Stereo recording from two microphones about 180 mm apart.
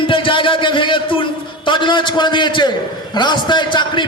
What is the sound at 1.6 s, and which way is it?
A man's voice, 25° left (ahead or behind).